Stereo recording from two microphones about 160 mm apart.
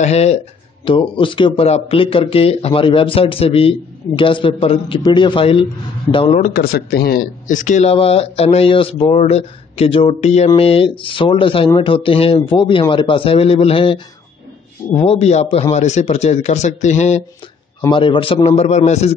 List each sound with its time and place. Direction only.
0.0 s a man's voice: 40° left (ahead or behind)
6.5 s a man's voice: 75° left (ahead or behind); by 17.2 s 45° left (ahead or behind)
17.9 s speech: 30° left (ahead or behind)